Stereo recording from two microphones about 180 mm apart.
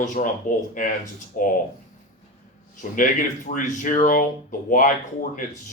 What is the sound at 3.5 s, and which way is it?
Speech, 45° left (ahead or behind).